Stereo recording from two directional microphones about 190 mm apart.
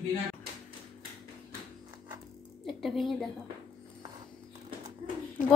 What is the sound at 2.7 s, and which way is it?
Music, centre (ahead or behind).